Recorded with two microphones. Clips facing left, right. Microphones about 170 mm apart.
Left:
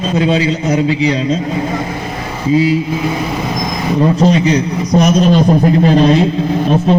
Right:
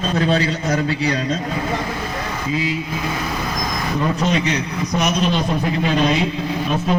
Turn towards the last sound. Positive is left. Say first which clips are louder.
# left 8 dB
turn(degrees=35)  # may be behind; listen again after turning